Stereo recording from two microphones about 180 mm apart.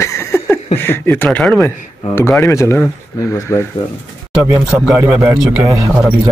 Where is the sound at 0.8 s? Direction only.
10° left (ahead or behind).